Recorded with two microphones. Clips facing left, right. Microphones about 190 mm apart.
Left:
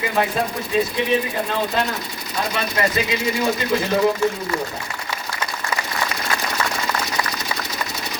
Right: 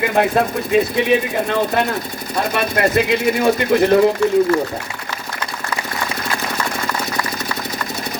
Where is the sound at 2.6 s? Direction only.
60° right (ahead or behind).